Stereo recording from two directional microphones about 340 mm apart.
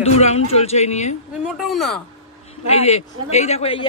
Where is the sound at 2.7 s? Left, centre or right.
Centre.